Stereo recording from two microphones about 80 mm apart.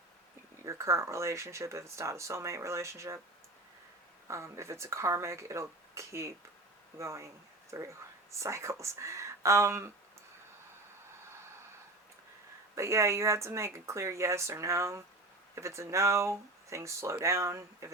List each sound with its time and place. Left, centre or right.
0.6 s speech: right
4.3 s speech: right
12.7 s speech: right